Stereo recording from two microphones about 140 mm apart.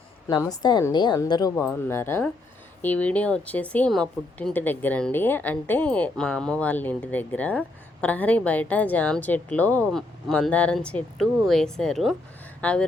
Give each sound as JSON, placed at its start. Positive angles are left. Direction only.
{"t": 0.3, "sound": "a woman's voice", "side_deg": 30}